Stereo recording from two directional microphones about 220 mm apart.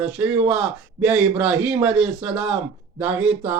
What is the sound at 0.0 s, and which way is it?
A man's voice, 5° right (ahead or behind).